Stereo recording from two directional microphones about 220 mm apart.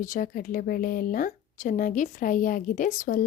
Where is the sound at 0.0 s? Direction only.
40° left (ahead or behind).